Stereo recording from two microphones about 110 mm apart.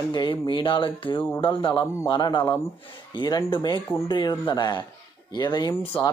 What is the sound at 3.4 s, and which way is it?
Speech, 45° left (ahead or behind).